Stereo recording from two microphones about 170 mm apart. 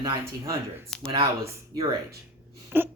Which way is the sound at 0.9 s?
5° left (ahead or behind).